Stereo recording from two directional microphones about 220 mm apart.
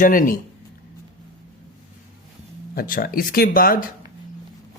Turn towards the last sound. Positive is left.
turn(degrees=40)  # may be behind; listen again after turning